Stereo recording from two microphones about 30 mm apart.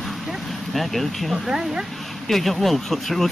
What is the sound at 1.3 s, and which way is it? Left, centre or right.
Speech, centre.